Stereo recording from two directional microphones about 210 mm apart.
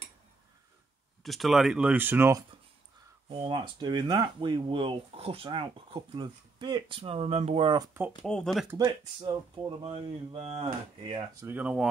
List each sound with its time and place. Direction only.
1.2 s speech: centre (ahead or behind)
3.3 s speech: 25° right (ahead or behind)
8.2 s speech: centre (ahead or behind)
8.8 s speech: 25° right (ahead or behind)
11.4 s speech: 5° right (ahead or behind)